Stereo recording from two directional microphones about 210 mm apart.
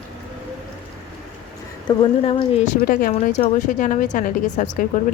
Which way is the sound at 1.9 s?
25° left (ahead or behind).